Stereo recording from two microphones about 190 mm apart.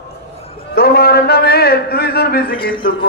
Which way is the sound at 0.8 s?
55° left (ahead or behind).